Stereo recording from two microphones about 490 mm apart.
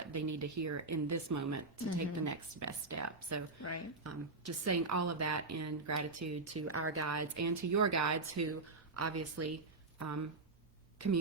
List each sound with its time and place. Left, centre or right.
0.1 s a woman's voice: right
3.6 s speech: left
4.0 s a woman's voice: right